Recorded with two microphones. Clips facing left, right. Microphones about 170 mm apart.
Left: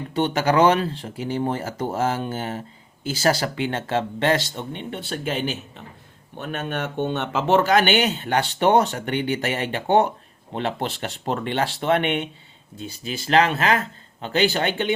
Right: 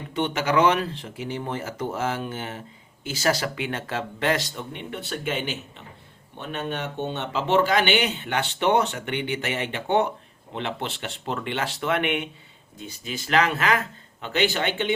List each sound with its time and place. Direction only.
0.1 s speech: 35° left (ahead or behind)
6.4 s speech: 50° left (ahead or behind)